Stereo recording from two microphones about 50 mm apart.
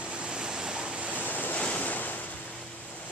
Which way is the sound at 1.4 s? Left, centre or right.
Left.